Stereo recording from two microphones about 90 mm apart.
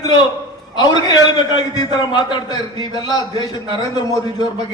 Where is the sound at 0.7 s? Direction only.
50° left (ahead or behind).